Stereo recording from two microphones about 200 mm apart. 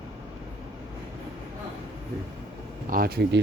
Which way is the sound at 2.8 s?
45° right (ahead or behind).